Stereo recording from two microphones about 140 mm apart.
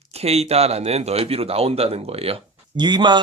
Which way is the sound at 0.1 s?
45° right (ahead or behind).